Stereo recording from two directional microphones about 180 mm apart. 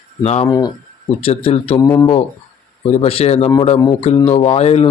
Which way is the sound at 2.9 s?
35° left (ahead or behind).